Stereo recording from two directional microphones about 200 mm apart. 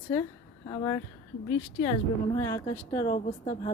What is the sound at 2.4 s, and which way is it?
Speech, 15° left (ahead or behind).